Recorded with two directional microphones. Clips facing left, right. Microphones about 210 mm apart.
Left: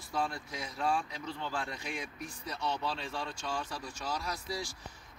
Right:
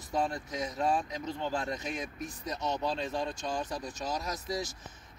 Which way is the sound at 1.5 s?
40° right (ahead or behind).